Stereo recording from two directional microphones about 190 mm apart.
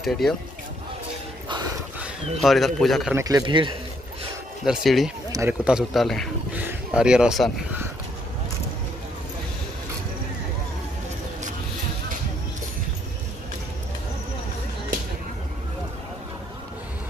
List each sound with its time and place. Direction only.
0.0 s speech: centre (ahead or behind)
2.0 s speech: centre (ahead or behind)
3.2 s a man's voice: 20° right (ahead or behind)
4.6 s speech: centre (ahead or behind)
6.5 s speech: 10° right (ahead or behind)